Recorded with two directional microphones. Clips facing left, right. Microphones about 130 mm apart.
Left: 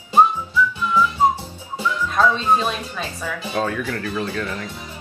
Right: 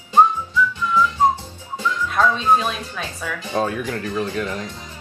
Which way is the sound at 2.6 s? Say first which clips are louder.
Left 1 dB; 10° left (ahead or behind).